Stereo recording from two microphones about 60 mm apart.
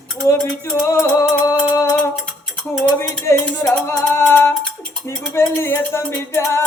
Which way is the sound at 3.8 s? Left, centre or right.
Left.